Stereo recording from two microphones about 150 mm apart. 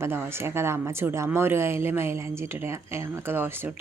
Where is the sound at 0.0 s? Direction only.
15° right (ahead or behind).